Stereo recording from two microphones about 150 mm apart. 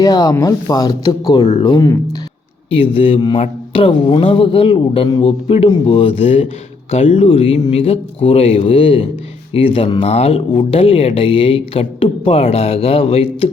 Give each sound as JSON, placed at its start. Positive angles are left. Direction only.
{"t": 0.0, "sound": "speech", "side_deg": 25}